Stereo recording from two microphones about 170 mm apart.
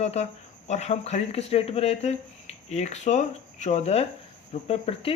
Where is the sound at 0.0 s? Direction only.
40° left (ahead or behind).